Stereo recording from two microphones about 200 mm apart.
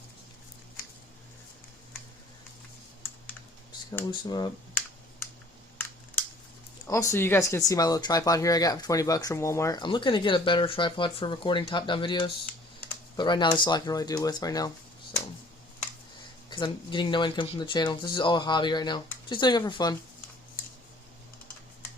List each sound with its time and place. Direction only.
4.1 s speech: 20° left (ahead or behind)
6.8 s speech: 15° left (ahead or behind)
16.5 s speech: 25° left (ahead or behind)